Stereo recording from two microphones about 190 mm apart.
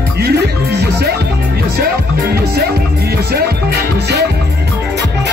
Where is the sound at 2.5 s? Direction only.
55° right (ahead or behind).